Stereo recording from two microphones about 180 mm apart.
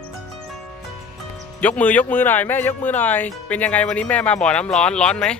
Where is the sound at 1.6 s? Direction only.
10° left (ahead or behind).